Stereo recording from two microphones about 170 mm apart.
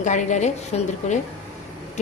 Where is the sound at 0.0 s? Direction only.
45° left (ahead or behind).